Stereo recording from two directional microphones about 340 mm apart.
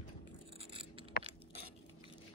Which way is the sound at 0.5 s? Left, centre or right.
Centre.